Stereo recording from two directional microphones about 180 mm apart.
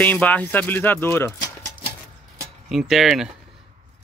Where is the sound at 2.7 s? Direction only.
Centre (ahead or behind).